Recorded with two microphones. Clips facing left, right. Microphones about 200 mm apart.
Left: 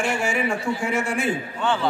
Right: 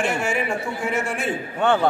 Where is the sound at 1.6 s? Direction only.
55° right (ahead or behind).